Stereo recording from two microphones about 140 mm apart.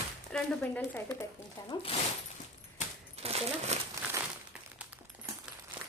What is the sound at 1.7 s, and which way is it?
Speech, 30° left (ahead or behind).